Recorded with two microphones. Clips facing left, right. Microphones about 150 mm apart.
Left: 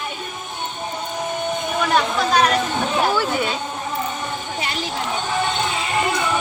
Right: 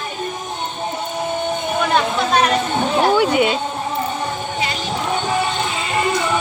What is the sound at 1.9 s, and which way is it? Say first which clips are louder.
Speech: even; centre (ahead or behind).